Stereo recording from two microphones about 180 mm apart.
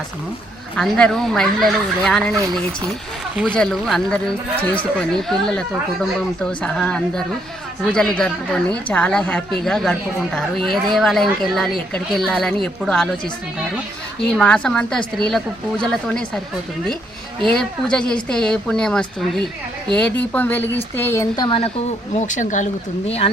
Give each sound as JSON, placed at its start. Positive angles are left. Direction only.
{"t": 0.8, "sound": "speech", "side_deg": 5}
{"t": 3.3, "sound": "a woman's voice", "side_deg": 5}
{"t": 14.3, "sound": "speech", "side_deg": 5}
{"t": 17.5, "sound": "a woman's voice", "side_deg": 5}
{"t": 21.3, "sound": "speech", "side_deg": 25}
{"t": 22.1, "sound": "speech", "side_deg": 45}